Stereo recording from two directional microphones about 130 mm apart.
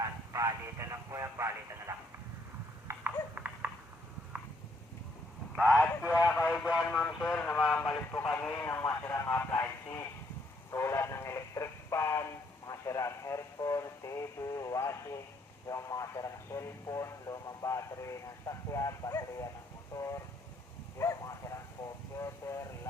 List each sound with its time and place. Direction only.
0.3 s speech: 25° right (ahead or behind)
2.8 s babbling: 15° right (ahead or behind)
5.7 s speech: 5° left (ahead or behind)
6.3 s speech: 15° left (ahead or behind)
10.7 s radio: 20° left (ahead or behind)
15.7 s speech: 25° left (ahead or behind)
21.0 s a sound: 25° left (ahead or behind)
22.2 s vehicle: 25° left (ahead or behind)